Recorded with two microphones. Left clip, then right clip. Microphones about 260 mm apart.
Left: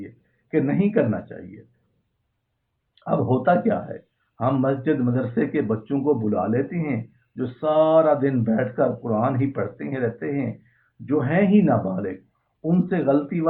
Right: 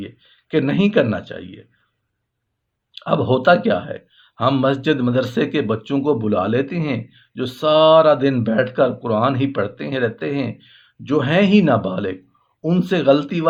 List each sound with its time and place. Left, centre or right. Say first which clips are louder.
0.5 s speech: right 4 dB; right
2.9 s speech: right 5 dB; right